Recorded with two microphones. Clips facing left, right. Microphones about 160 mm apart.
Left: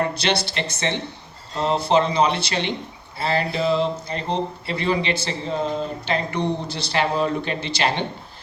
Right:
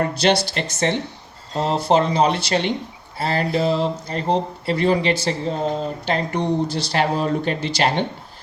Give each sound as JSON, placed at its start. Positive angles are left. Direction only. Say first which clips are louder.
{"t": 0.0, "sound": "speech", "louder": "right 4 dB", "side_deg": -45}